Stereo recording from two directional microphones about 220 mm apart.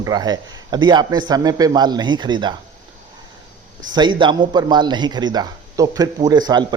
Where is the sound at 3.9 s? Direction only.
20° right (ahead or behind).